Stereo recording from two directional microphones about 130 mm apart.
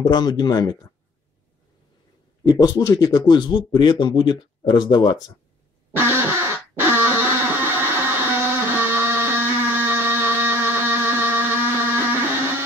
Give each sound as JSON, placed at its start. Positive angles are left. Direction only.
{"t": 0.0, "sound": "speech", "side_deg": 30}
{"t": 2.7, "sound": "speech", "side_deg": 25}
{"t": 5.9, "sound": "a sound", "side_deg": -15}